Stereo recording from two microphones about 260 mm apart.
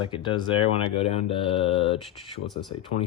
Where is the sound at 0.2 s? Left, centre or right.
Centre.